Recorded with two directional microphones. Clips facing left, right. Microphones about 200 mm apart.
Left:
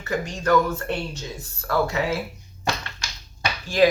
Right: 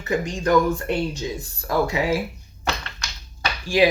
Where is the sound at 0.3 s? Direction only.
15° right (ahead or behind).